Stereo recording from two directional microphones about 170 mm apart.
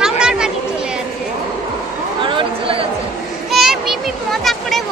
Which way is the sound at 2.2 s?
30° right (ahead or behind).